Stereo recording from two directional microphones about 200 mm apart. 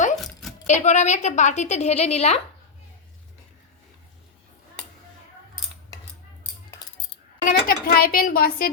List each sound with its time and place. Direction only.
0.2 s a sound: centre (ahead or behind)
0.7 s a woman's voice: 35° left (ahead or behind)
7.4 s a woman's voice: 50° left (ahead or behind)